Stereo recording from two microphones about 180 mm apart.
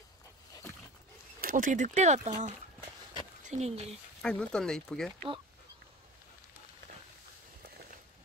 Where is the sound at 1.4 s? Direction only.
50° right (ahead or behind).